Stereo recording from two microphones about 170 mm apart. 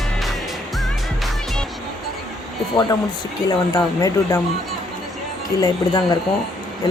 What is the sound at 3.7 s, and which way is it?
Speech, 20° left (ahead or behind).